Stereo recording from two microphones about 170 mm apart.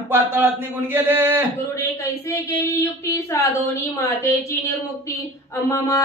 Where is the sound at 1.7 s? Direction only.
15° left (ahead or behind).